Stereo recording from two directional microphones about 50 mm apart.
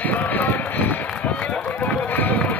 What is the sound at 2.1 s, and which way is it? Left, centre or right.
Run, left.